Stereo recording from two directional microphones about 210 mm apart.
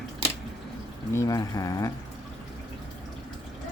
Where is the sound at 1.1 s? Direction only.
15° left (ahead or behind).